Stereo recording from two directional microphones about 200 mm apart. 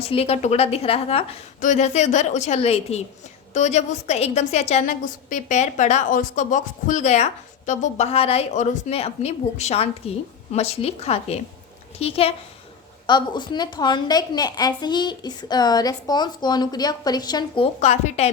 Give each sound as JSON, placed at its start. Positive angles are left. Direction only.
{"t": 0.1, "sound": "a woman's voice", "side_deg": 30}